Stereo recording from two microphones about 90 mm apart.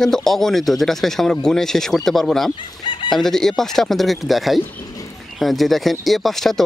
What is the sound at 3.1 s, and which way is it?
Speech, 5° left (ahead or behind).